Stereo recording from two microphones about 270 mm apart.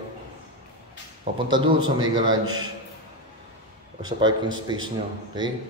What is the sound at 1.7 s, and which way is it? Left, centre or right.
Speech, centre.